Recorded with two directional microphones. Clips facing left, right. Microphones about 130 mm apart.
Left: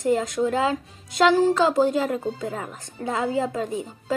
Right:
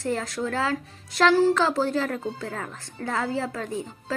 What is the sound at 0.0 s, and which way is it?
A woman's voice, 20° left (ahead or behind).